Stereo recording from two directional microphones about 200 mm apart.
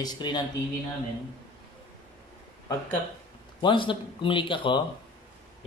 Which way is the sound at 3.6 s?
25° left (ahead or behind).